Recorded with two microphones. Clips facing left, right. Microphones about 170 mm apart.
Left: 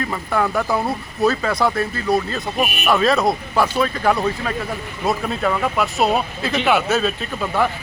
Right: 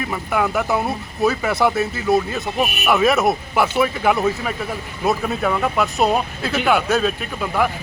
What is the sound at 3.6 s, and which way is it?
Speech, 10° right (ahead or behind).